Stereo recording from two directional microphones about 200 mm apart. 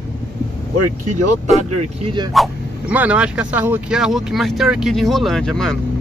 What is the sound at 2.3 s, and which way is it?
Speech, 5° right (ahead or behind).